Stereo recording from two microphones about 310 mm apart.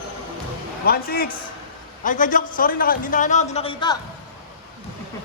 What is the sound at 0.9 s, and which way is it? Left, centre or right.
A man's voice, left.